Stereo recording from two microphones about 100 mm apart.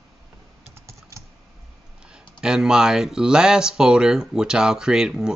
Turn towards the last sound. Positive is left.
turn(degrees=-5)  # may be behind; listen again after turning